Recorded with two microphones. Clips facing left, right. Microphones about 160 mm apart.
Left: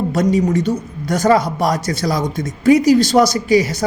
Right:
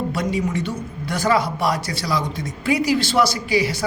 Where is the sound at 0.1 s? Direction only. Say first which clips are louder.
Left 7 dB; 45° left (ahead or behind).